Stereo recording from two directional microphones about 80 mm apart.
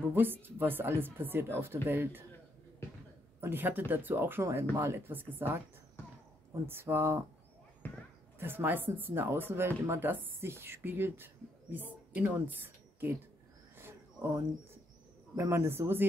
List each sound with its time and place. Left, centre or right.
0.1 s speech: right
3.3 s speech: right
4.5 s speech: right
6.5 s a man's voice: right
7.8 s a sound: left
8.4 s a woman's voice: right
13.7 s a sound: right
15.3 s a man's voice: right